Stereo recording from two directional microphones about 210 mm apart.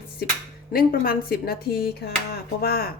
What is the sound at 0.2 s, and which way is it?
A woman's voice, 45° left (ahead or behind).